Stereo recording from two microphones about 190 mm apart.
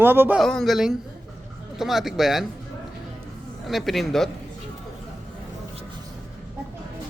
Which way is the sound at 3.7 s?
Centre (ahead or behind).